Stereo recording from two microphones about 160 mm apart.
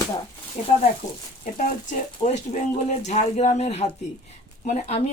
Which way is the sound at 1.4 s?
50° left (ahead or behind).